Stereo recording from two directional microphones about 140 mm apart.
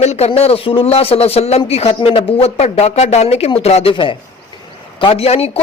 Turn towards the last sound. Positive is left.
turn(degrees=45)  # may be behind; listen again after turning